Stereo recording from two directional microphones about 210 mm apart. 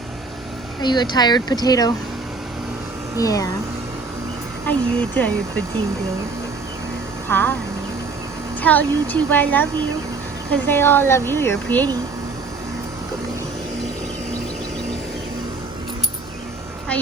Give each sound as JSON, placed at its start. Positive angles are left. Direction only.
{"t": 0.8, "sound": "speech", "side_deg": 20}
{"t": 3.2, "sound": "a woman's voice", "side_deg": 15}
{"t": 4.6, "sound": "a woman's voice", "side_deg": 5}
{"t": 7.3, "sound": "speech", "side_deg": 10}
{"t": 8.6, "sound": "a woman's voice", "side_deg": 10}